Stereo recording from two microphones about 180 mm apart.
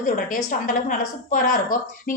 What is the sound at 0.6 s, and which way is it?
A woman's voice, 50° left (ahead or behind).